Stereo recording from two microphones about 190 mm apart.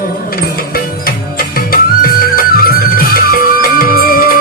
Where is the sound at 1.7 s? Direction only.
50° left (ahead or behind).